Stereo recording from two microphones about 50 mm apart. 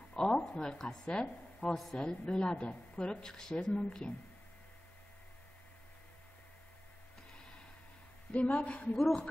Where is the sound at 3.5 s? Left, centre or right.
Left.